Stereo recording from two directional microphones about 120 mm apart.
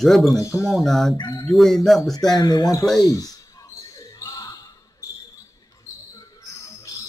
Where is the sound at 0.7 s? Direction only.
Centre (ahead or behind).